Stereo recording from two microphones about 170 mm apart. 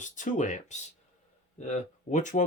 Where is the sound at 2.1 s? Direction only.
45° left (ahead or behind).